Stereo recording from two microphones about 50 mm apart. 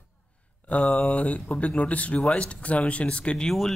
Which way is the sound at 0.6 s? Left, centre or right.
Left.